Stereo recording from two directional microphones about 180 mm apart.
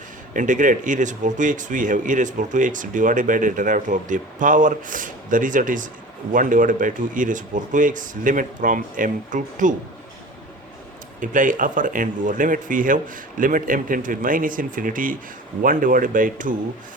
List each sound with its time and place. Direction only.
0.3 s speech: 45° right (ahead or behind)
11.2 s speech: 45° right (ahead or behind)